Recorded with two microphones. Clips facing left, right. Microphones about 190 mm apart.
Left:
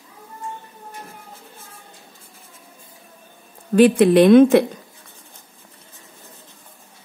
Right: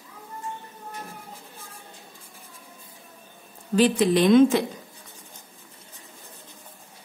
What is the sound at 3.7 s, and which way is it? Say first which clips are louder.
Speech: left 7 dB; 60° left (ahead or behind).